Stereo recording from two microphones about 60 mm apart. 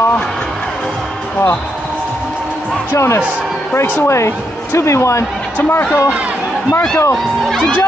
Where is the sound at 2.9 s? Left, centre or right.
Left.